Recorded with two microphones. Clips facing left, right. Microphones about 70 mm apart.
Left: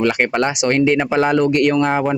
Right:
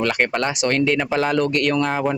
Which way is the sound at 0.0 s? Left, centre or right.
Centre.